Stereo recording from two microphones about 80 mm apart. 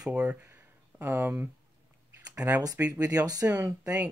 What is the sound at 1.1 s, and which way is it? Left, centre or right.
Speech, right.